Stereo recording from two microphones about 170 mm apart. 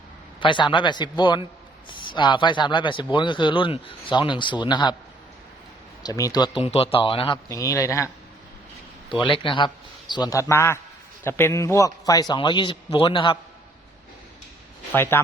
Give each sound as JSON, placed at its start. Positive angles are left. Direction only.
{"t": 0.3, "sound": "a man's voice", "side_deg": 30}
{"t": 6.0, "sound": "speech", "side_deg": 20}
{"t": 7.4, "sound": "speech", "side_deg": 20}
{"t": 9.2, "sound": "a man's voice", "side_deg": 30}
{"t": 14.9, "sound": "speech", "side_deg": 15}